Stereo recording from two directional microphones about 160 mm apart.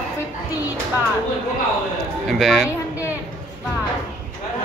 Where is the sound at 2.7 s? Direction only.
10° right (ahead or behind).